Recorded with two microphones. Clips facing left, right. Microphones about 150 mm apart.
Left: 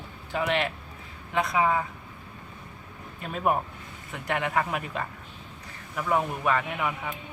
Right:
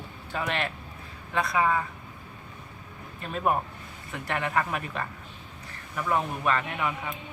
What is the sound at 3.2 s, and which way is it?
Speech, 10° left (ahead or behind).